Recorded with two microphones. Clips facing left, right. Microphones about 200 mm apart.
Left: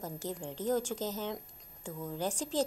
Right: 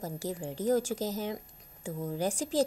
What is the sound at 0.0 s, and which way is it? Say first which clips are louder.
Speech: right 3 dB; 10° right (ahead or behind).